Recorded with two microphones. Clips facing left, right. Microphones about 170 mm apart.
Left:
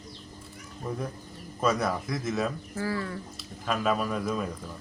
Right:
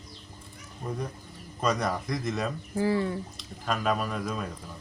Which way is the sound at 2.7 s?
20° right (ahead or behind).